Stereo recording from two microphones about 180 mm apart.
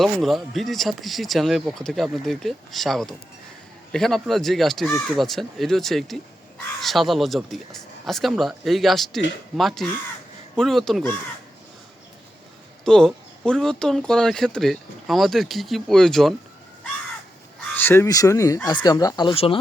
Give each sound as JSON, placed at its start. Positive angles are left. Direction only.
{"t": 0.0, "sound": "speech", "side_deg": 0}
{"t": 12.8, "sound": "speech", "side_deg": 5}
{"t": 17.6, "sound": "speech", "side_deg": 10}